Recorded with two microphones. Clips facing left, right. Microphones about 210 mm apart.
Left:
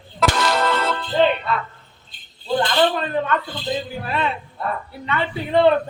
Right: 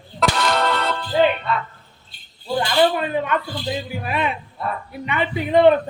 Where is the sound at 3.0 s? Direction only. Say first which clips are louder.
Even; 10° right (ahead or behind).